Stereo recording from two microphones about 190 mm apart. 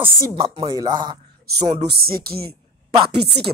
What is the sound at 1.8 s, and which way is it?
Speech, 55° right (ahead or behind).